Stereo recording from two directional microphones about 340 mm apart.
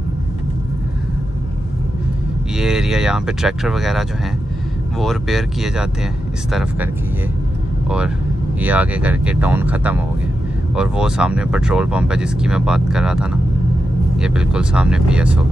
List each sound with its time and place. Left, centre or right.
2.5 s speech: centre
5.0 s speech: centre
8.5 s speech: centre